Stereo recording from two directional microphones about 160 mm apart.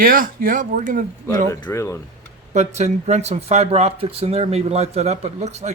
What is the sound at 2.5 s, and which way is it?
Speech, 45° right (ahead or behind).